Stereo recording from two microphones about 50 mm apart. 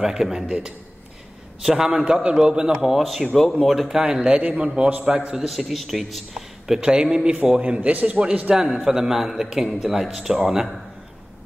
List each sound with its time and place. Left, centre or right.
0.0 s a man's voice: centre
2.8 s a man's voice: centre
4.0 s a man's voice: centre
4.3 s a man's voice: right
5.3 s a man's voice: centre
6.8 s a man's voice: centre